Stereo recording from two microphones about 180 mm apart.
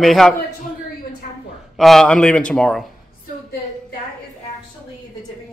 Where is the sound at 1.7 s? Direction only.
Centre (ahead or behind).